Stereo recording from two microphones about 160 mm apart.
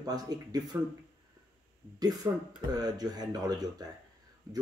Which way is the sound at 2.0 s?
25° right (ahead or behind).